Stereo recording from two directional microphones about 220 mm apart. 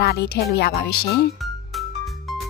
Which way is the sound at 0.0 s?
45° left (ahead or behind).